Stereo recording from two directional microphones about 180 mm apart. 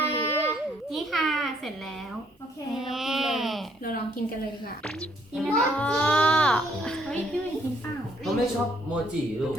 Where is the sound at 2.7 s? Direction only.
Centre (ahead or behind).